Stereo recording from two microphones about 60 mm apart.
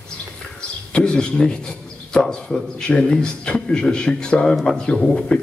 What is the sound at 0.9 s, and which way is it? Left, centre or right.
A man's voice, centre.